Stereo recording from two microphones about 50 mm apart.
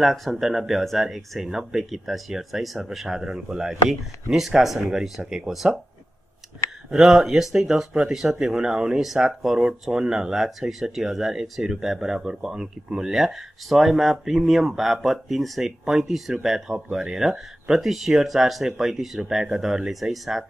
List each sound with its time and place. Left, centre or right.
0.0 s speech: centre
5.2 s speech: centre
7.0 s speech: centre